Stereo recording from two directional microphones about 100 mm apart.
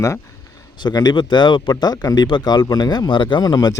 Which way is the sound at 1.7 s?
40° left (ahead or behind).